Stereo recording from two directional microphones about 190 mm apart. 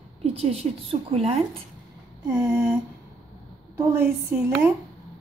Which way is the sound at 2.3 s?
15° right (ahead or behind).